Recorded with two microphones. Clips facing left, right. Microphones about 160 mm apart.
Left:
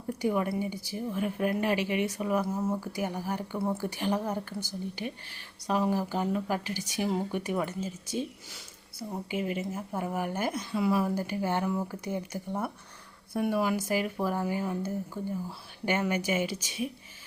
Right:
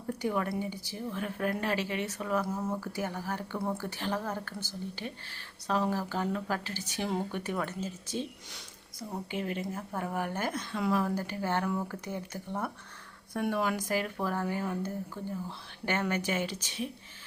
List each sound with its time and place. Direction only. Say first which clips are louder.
0.1 s speech: left 3 dB; 10° left (ahead or behind)
5.6 s speech: left 2 dB; 10° left (ahead or behind)